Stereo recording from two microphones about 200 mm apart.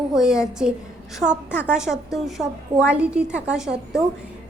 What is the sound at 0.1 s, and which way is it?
A woman's voice, 5° right (ahead or behind).